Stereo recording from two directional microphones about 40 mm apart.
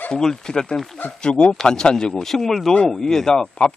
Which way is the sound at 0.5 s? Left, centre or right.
Left.